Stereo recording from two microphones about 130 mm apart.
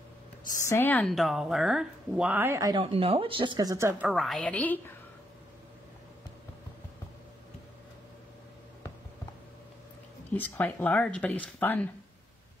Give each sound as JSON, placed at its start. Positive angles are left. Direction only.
{"t": 0.5, "sound": "a woman's voice", "side_deg": 20}
{"t": 1.0, "sound": "speech", "side_deg": 0}
{"t": 2.7, "sound": "speech", "side_deg": -45}
{"t": 3.5, "sound": "speech", "side_deg": -25}
{"t": 4.1, "sound": "speech", "side_deg": 0}
{"t": 10.3, "sound": "speech", "side_deg": 15}